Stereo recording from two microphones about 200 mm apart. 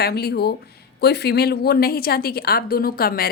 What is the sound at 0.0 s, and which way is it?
A woman's voice, 50° left (ahead or behind).